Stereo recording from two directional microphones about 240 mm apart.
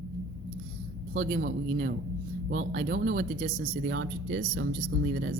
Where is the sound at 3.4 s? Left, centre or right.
Right.